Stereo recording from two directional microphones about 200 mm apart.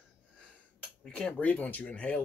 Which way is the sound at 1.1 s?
5° left (ahead or behind).